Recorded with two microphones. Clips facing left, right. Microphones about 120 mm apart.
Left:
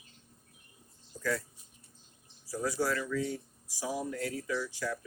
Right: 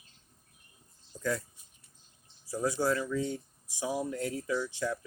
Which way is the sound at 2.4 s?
25° right (ahead or behind).